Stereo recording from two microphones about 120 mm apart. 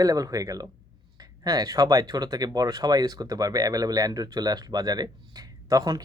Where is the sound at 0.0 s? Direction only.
30° right (ahead or behind).